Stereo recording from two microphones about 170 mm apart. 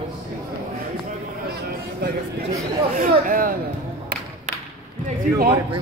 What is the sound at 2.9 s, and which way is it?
Speech, 55° right (ahead or behind).